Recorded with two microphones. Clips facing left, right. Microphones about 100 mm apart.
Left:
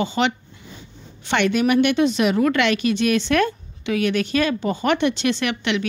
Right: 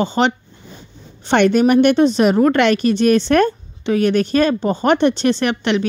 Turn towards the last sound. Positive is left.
turn(degrees=-40)  # may be behind; listen again after turning